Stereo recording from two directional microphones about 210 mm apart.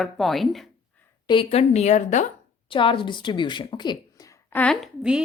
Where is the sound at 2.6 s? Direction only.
25° left (ahead or behind).